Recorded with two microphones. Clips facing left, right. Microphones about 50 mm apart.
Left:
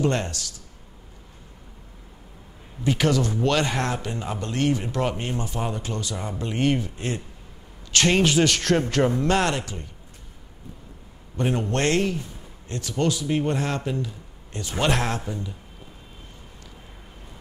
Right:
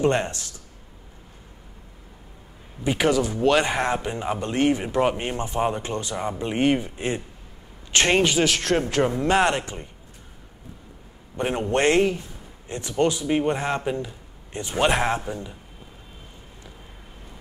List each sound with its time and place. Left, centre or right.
0.0 s speech: right
2.8 s speech: centre
8.2 s speech: centre
9.2 s speech: centre
11.3 s speech: right